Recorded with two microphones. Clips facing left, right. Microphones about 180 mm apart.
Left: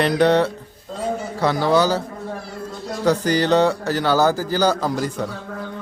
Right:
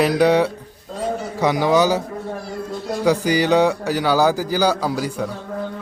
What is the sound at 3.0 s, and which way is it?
A man's voice, 10° right (ahead or behind).